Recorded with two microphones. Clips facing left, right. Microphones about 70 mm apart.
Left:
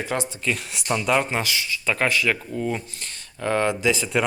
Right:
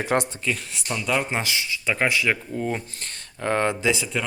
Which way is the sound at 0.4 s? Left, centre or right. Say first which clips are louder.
Left 1 dB; centre.